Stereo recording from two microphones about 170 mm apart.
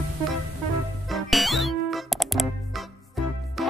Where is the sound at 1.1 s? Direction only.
Centre (ahead or behind).